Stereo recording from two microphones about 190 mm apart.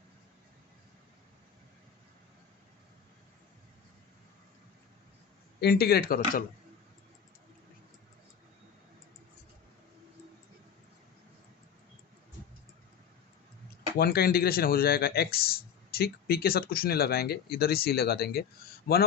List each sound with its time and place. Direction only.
5.5 s speech: 55° left (ahead or behind)
14.0 s speech: 55° left (ahead or behind)